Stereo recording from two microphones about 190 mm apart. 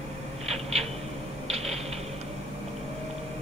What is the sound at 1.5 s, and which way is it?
Typewriter, 35° right (ahead or behind).